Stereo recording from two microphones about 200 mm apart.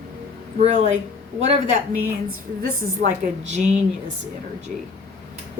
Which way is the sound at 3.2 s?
35° right (ahead or behind).